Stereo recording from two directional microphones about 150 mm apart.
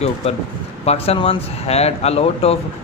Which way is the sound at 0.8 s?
45° left (ahead or behind).